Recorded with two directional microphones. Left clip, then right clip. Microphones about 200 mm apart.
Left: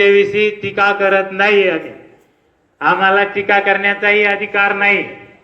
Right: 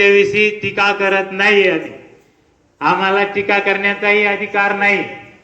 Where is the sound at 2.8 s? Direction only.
55° right (ahead or behind).